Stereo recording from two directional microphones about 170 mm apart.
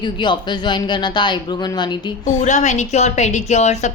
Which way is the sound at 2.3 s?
45° left (ahead or behind).